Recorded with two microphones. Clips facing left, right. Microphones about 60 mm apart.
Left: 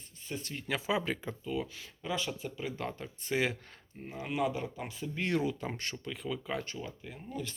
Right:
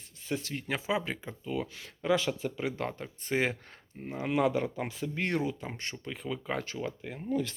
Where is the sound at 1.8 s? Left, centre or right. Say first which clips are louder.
Right 7 dB; right.